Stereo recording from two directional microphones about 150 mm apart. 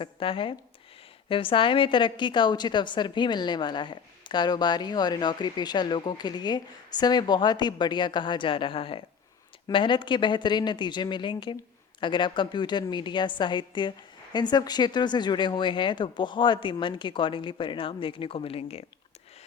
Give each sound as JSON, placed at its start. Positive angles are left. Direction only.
{"t": 0.0, "sound": "a woman's voice", "side_deg": 35}